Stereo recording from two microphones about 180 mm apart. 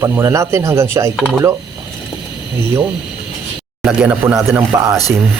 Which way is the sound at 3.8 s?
5° right (ahead or behind).